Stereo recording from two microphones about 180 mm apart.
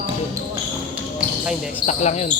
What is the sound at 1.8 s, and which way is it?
Speech, 40° left (ahead or behind).